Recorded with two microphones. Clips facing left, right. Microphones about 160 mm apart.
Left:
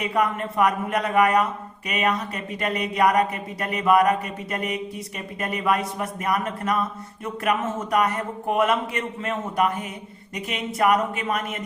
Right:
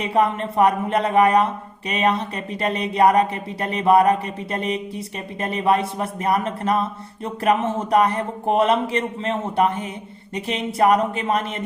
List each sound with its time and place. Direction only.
0.0 s speech: 30° right (ahead or behind)